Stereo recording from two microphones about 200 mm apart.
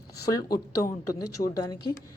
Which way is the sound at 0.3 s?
20° left (ahead or behind).